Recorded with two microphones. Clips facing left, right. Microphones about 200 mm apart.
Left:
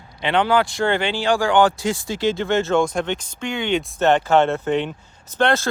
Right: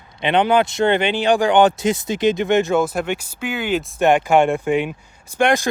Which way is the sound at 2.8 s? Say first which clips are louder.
Even; 5° right (ahead or behind).